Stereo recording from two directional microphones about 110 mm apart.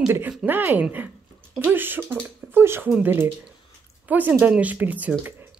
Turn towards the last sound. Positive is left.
turn(degrees=-15)  # may be behind; listen again after turning